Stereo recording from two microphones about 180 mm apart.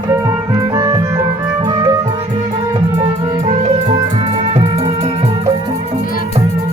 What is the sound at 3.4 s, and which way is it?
Music, 40° right (ahead or behind).